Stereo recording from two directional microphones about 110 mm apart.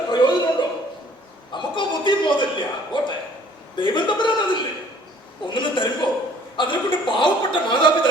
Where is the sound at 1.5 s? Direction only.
45° left (ahead or behind).